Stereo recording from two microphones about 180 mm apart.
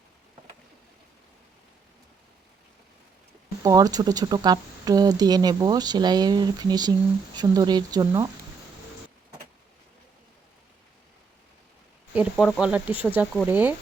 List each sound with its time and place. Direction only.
3.6 s speech: 20° right (ahead or behind)
12.1 s speech: 5° right (ahead or behind)